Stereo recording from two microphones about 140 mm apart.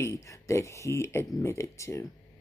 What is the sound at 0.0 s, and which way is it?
Speech, 20° left (ahead or behind).